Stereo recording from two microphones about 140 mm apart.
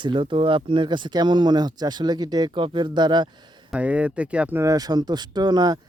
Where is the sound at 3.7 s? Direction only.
10° right (ahead or behind); by 5.8 s 30° right (ahead or behind).